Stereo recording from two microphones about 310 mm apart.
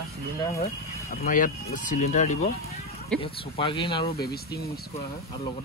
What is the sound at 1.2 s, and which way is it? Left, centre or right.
Speech, left.